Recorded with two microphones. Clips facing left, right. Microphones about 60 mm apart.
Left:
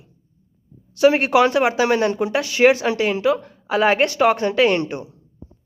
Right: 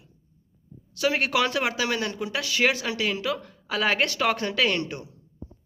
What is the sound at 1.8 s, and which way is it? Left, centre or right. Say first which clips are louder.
Speech: left 10 dB; left.